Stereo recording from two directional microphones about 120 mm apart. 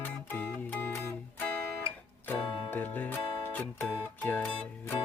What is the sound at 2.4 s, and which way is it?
Music, 45° left (ahead or behind).